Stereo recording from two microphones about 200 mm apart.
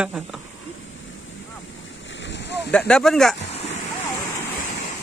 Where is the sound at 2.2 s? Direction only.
60° left (ahead or behind).